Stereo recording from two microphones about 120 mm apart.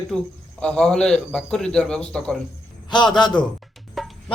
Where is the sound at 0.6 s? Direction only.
10° left (ahead or behind).